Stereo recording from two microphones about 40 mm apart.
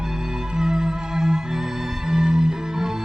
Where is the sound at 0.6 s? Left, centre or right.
Centre.